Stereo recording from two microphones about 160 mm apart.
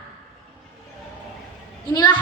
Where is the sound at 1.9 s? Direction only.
25° left (ahead or behind).